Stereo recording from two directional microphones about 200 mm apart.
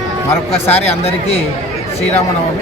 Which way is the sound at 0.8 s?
30° left (ahead or behind).